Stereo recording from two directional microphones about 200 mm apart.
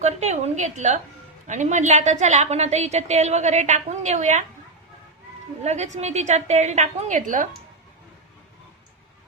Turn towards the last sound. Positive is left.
turn(degrees=-40)  # may be behind; listen again after turning